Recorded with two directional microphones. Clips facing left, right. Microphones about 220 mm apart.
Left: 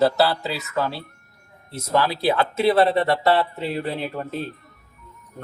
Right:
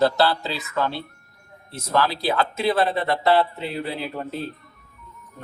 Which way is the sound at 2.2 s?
35° left (ahead or behind).